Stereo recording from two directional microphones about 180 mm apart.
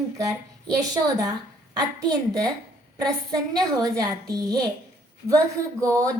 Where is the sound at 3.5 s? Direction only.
20° right (ahead or behind).